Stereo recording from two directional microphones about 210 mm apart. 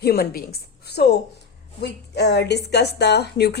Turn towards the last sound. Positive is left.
turn(degrees=50)  # may be behind; listen again after turning